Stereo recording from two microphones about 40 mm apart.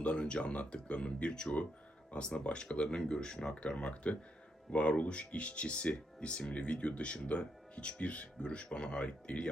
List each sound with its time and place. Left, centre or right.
0.0 s speech: left